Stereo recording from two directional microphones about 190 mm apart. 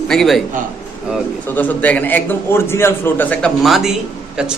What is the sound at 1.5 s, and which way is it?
A man's voice, 10° left (ahead or behind).